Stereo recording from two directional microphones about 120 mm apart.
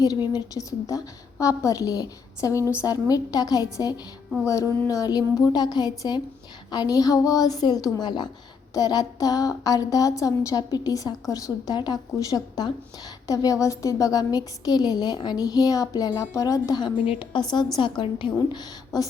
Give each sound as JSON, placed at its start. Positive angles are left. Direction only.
{"t": 0.3, "sound": "a woman's voice", "side_deg": 30}
{"t": 17.1, "sound": "a woman's voice", "side_deg": 45}